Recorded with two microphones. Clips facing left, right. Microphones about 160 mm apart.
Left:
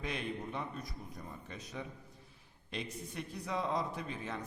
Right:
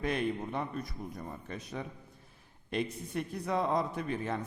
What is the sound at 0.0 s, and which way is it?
Speech, 55° right (ahead or behind).